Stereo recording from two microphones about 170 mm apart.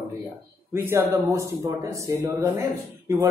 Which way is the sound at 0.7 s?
15° right (ahead or behind).